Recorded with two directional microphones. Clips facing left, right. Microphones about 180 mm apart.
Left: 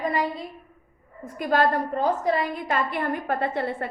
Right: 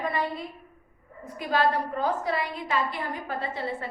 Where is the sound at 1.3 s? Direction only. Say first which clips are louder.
Left 3 dB; 50° left (ahead or behind).